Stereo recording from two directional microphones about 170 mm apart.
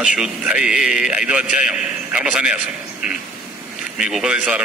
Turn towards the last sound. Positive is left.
turn(degrees=-5)  # may be behind; listen again after turning